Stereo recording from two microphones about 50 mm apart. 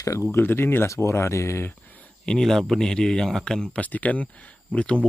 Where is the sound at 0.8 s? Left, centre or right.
Left.